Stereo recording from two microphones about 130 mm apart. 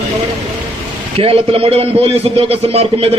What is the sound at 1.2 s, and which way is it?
A man's voice, 45° right (ahead or behind).